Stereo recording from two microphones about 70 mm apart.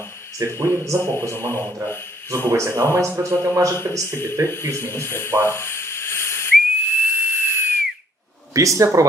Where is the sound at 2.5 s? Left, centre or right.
Right.